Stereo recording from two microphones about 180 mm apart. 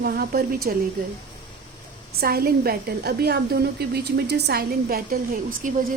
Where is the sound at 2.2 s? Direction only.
55° right (ahead or behind).